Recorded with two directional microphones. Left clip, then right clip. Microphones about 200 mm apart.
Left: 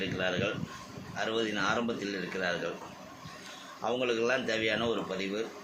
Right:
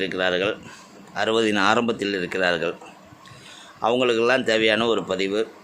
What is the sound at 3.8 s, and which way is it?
Speech, 60° right (ahead or behind).